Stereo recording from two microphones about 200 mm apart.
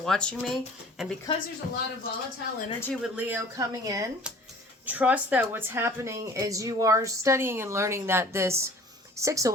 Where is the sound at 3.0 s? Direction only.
10° right (ahead or behind).